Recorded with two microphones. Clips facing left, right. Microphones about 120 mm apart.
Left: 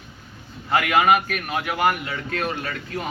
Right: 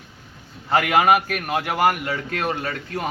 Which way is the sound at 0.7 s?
30° right (ahead or behind).